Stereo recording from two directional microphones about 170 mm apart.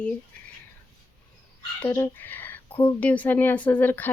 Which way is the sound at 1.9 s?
10° left (ahead or behind).